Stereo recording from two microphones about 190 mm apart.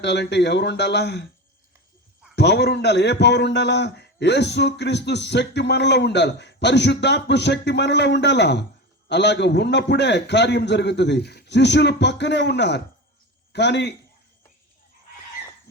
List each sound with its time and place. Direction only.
0.0 s a man's voice: 65° left (ahead or behind)
2.3 s a man's voice: 65° left (ahead or behind)